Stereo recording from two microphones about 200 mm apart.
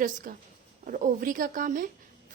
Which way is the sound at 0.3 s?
45° right (ahead or behind).